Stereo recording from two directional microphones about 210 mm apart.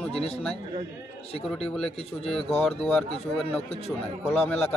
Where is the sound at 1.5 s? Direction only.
Centre (ahead or behind).